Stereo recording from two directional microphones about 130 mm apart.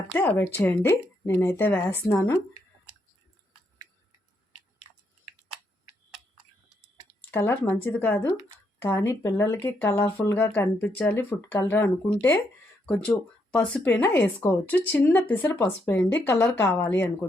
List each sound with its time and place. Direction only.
0.1 s speech: 15° left (ahead or behind)
7.3 s speech: 15° left (ahead or behind)
12.8 s speech: 5° left (ahead or behind)